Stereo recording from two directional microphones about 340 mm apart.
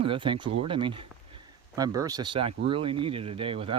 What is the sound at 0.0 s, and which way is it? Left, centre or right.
Speech, centre.